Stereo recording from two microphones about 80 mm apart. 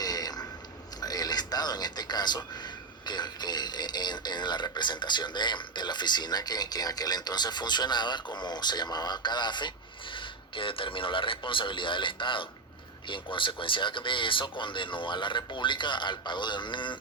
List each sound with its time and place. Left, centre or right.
0.0 s a sound: left
3.1 s speech: left
10.2 s speech: left